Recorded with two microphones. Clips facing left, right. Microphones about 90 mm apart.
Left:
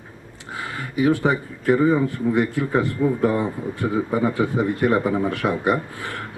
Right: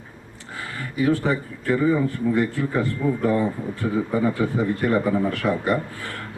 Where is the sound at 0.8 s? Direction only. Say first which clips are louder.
Left 2 dB; 20° left (ahead or behind).